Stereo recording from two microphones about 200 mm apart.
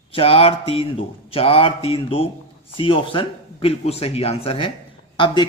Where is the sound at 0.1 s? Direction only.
30° left (ahead or behind).